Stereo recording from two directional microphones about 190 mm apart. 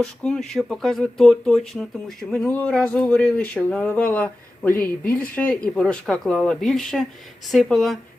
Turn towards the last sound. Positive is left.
turn(degrees=0)  # may be behind; listen again after turning